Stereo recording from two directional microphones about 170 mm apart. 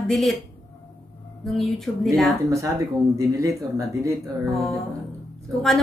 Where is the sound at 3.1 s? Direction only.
20° right (ahead or behind).